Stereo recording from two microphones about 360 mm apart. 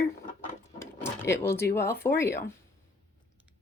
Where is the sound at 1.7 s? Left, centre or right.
Centre.